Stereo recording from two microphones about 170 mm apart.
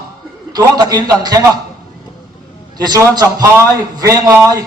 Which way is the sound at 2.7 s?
25° right (ahead or behind).